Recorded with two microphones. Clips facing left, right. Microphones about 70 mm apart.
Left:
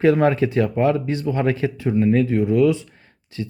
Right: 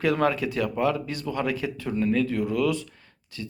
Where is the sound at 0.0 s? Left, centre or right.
Left.